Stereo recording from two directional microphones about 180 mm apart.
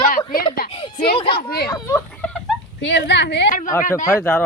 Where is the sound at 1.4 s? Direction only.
60° left (ahead or behind).